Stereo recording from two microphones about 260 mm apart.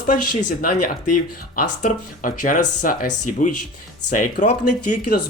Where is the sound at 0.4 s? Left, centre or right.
Left.